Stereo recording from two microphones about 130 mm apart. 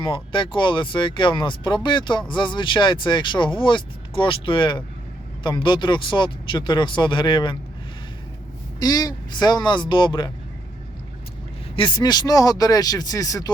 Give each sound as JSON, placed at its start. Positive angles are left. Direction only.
{"t": 0.0, "sound": "speech", "side_deg": 40}
{"t": 8.8, "sound": "speech", "side_deg": 30}
{"t": 11.8, "sound": "speech", "side_deg": 35}